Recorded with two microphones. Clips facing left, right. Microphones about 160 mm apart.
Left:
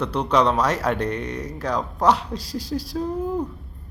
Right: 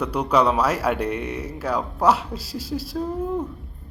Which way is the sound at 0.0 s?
10° right (ahead or behind).